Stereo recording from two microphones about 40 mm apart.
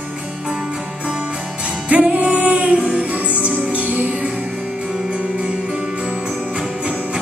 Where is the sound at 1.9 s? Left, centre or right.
Right.